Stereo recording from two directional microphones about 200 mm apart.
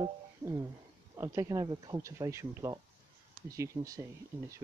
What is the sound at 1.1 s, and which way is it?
Speech, 15° right (ahead or behind).